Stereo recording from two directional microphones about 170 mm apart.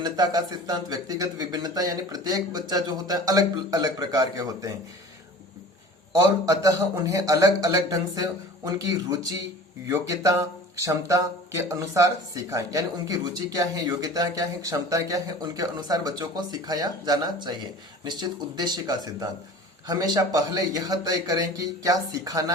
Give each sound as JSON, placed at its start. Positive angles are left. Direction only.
{"t": 0.0, "sound": "speech", "side_deg": -25}
{"t": 6.2, "sound": "speech", "side_deg": -20}